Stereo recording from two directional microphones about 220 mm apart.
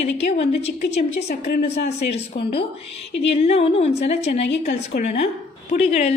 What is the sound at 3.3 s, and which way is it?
A woman's voice, 30° left (ahead or behind).